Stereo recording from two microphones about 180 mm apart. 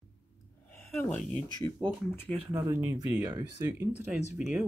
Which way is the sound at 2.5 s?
20° right (ahead or behind).